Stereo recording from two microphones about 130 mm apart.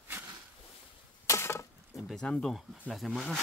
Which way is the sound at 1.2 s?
20° left (ahead or behind).